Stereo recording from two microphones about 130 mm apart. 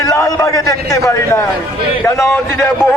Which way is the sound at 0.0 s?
25° left (ahead or behind).